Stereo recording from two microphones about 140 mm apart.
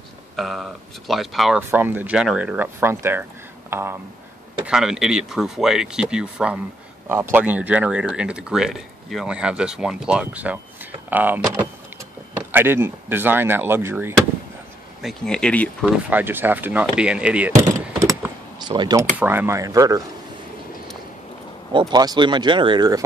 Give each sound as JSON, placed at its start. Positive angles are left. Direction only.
{"t": 0.4, "sound": "speech", "side_deg": 0}
{"t": 1.6, "sound": "speech", "side_deg": -15}
{"t": 4.6, "sound": "speech", "side_deg": -5}
{"t": 15.0, "sound": "speech", "side_deg": 0}
{"t": 15.8, "sound": "speech", "side_deg": -10}
{"t": 17.6, "sound": "a sound", "side_deg": -20}
{"t": 19.1, "sound": "speech", "side_deg": -15}
{"t": 21.7, "sound": "speech", "side_deg": -30}